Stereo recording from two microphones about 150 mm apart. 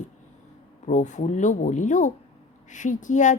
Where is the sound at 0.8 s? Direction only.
55° left (ahead or behind).